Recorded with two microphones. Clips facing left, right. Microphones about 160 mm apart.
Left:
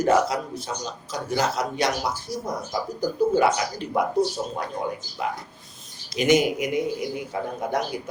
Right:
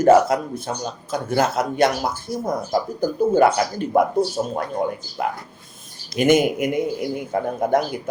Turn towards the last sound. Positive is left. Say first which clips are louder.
# right 7 dB
turn(degrees=-50)  # may be behind; listen again after turning